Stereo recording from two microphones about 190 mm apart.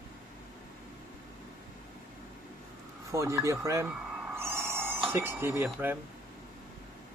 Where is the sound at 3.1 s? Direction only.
15° right (ahead or behind).